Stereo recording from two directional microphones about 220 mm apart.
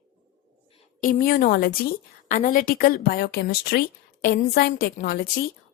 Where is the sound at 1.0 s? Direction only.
40° left (ahead or behind).